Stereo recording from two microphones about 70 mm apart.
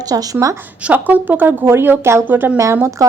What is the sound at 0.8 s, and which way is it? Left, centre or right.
Speech, right.